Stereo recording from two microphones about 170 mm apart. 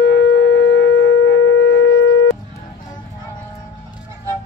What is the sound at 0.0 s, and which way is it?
Shofar, 80° left.